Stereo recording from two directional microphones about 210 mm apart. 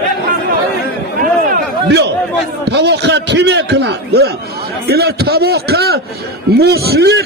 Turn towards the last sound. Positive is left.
turn(degrees=-50)  # may be behind; listen again after turning